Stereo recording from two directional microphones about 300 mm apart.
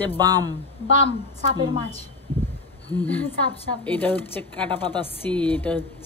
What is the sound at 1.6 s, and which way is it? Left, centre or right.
Speech, centre.